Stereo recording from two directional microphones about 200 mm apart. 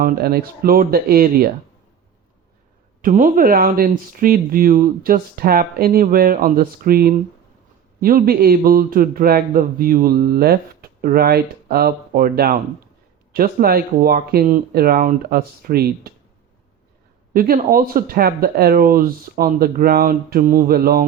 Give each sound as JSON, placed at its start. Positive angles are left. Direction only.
{"t": 0.0, "sound": "a man's voice", "side_deg": -50}
{"t": 3.0, "sound": "a man's voice", "side_deg": -40}
{"t": 17.3, "sound": "a man's voice", "side_deg": -45}